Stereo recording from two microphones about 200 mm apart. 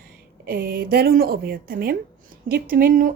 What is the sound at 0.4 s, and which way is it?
A woman's voice, 45° right (ahead or behind).